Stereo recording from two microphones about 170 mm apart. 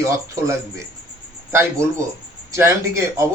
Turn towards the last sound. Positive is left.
turn(degrees=-15)  # may be behind; listen again after turning